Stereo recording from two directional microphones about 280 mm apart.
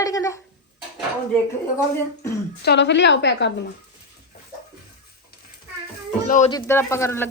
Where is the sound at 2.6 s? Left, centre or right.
Left.